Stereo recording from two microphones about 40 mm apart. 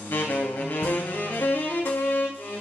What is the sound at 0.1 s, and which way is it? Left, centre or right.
Music, left.